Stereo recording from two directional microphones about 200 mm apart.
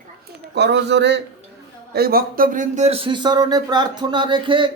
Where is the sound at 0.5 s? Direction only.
60° right (ahead or behind).